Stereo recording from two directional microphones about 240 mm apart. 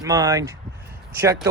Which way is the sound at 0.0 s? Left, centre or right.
Centre.